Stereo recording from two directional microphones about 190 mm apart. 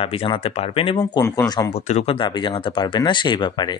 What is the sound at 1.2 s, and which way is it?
Speech, 20° left (ahead or behind).